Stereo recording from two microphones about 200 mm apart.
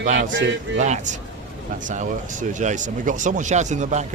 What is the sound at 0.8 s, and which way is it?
A man's voice, 35° right (ahead or behind).